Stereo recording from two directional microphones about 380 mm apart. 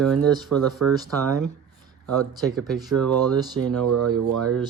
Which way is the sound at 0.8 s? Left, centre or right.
Right.